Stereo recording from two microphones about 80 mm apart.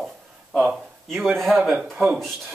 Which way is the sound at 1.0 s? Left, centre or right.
Centre.